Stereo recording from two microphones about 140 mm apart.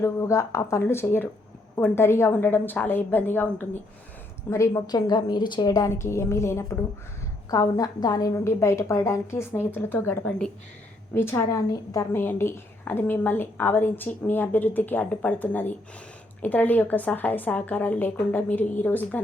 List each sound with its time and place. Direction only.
0.0 s a woman's voice: 20° left (ahead or behind)